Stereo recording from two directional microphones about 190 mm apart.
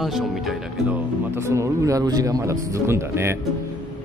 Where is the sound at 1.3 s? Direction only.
15° right (ahead or behind).